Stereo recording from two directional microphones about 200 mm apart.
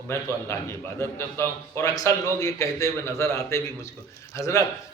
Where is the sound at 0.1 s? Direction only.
15° left (ahead or behind).